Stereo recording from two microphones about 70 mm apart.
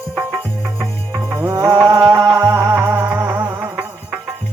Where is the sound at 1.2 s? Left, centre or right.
Right.